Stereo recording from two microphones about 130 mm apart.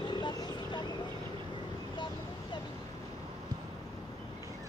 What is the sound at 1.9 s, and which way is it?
Vehicle, 35° left (ahead or behind).